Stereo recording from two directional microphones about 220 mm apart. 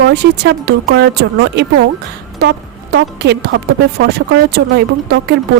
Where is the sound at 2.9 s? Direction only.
50° right (ahead or behind).